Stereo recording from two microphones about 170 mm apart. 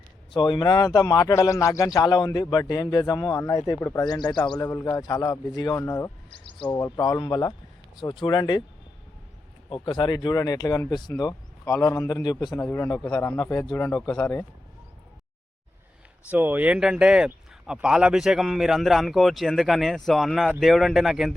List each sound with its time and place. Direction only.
0.3 s a man's voice: 25° left (ahead or behind)
9.6 s a man's voice: 30° left (ahead or behind); by 14.4 s 10° left (ahead or behind)
16.3 s speech: 10° right (ahead or behind)